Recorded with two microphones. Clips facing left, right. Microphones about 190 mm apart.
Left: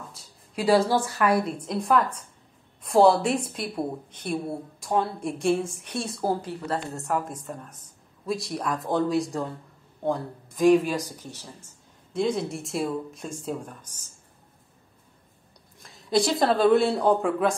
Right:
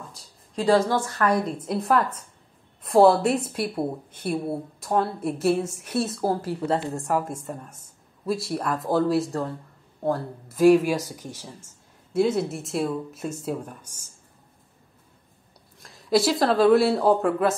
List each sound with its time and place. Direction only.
0.1 s a woman's voice: 5° left (ahead or behind)
6.6 s a woman's voice: 30° right (ahead or behind)
7.1 s a woman's voice: 5° right (ahead or behind)
15.8 s a woman's voice: centre (ahead or behind)